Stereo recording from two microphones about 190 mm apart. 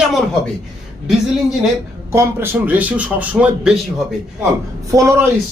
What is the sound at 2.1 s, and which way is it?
Speech, 10° right (ahead or behind).